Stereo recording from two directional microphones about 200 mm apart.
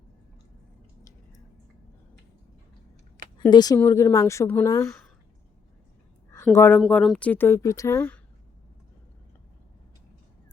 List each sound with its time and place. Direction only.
3.5 s speech: 20° left (ahead or behind)
4.9 s a sound: 5° left (ahead or behind)
6.3 s speech: 10° left (ahead or behind)